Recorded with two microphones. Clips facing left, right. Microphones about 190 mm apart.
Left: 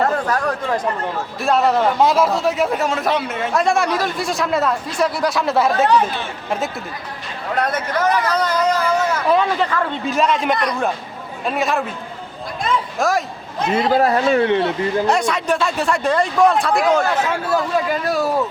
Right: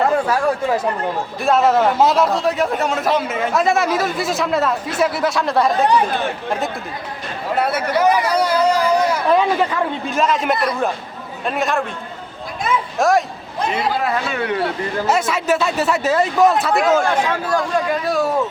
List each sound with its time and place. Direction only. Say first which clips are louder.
0.0 s a man's voice: right 2 dB; 10° right (ahead or behind)
5.7 s speech: left 1 dB; 15° right (ahead or behind)
7.5 s speech: right 2 dB; 10° right (ahead or behind)
10.1 s a man's voice: left 1 dB; centre (ahead or behind)
12.6 s a sound: right 2 dB; centre (ahead or behind)
14.0 s speech: left 6 dB; 40° left (ahead or behind)
15.0 s a man's voice: even; 5° right (ahead or behind)